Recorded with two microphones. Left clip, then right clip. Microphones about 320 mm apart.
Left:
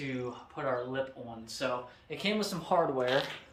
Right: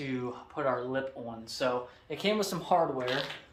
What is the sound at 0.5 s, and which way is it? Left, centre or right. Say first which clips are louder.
Speech: right 2 dB; centre.